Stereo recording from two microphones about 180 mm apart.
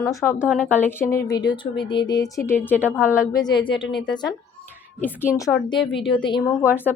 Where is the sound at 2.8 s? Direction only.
10° right (ahead or behind).